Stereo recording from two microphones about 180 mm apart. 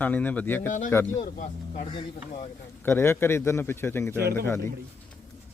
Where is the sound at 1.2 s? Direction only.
45° left (ahead or behind).